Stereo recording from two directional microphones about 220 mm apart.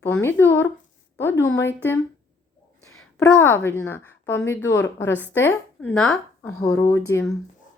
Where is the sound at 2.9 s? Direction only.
70° left (ahead or behind).